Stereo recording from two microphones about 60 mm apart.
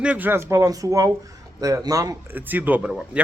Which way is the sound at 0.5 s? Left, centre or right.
Right.